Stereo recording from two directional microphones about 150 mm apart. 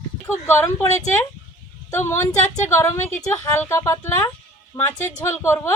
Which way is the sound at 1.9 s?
15° left (ahead or behind).